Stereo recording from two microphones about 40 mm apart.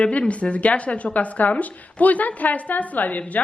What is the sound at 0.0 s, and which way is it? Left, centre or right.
Speech, left.